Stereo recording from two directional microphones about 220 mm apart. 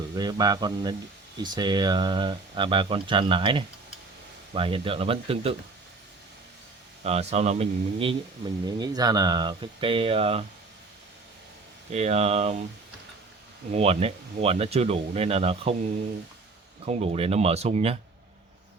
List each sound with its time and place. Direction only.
0.2 s a man's voice: 20° right (ahead or behind)
7.0 s speech: 30° right (ahead or behind)
11.9 s speech: 30° right (ahead or behind)
13.7 s speech: 30° right (ahead or behind)
16.8 s speech: 30° right (ahead or behind)